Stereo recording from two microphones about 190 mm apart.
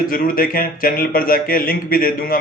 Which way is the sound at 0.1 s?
50° left (ahead or behind).